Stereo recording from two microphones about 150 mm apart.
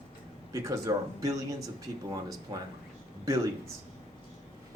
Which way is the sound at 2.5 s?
30° right (ahead or behind).